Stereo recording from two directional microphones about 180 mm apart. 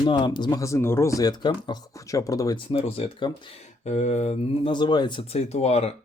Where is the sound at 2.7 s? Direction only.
30° left (ahead or behind).